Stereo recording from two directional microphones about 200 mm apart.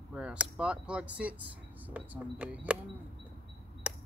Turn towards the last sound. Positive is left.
turn(degrees=-5)  # may be behind; listen again after turning